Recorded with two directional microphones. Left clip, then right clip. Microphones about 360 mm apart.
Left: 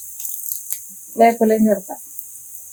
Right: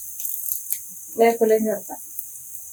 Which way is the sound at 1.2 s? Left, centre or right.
Left.